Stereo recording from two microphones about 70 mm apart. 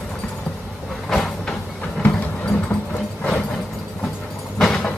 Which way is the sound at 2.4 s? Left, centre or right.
Centre.